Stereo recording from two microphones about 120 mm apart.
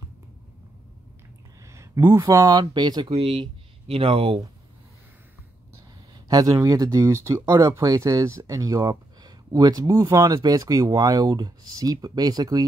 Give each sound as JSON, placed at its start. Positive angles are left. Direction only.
{"t": 1.7, "sound": "a sound", "side_deg": -20}
{"t": 2.2, "sound": "speech", "side_deg": -30}
{"t": 3.1, "sound": "speech", "side_deg": -50}
{"t": 6.2, "sound": "speech", "side_deg": -30}